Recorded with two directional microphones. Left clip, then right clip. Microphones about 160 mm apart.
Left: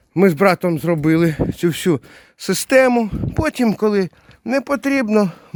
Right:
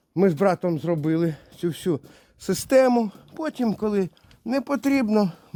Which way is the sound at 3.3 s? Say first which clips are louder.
Left 8 dB; 30° left (ahead or behind).